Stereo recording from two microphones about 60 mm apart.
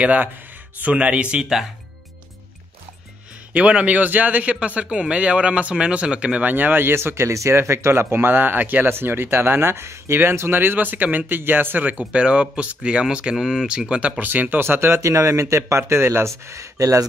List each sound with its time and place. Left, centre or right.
0.0 s speech: right
3.5 s speech: right
6.5 s speech: right; by 14.2 s centre
14.2 s speech: right
15.0 s speech: right
16.4 s speech: right